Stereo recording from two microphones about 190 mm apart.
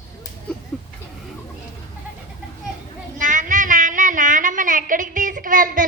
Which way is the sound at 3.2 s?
45° right (ahead or behind).